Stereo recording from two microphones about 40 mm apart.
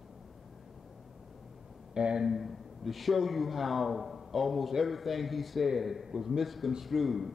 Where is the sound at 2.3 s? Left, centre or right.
Centre.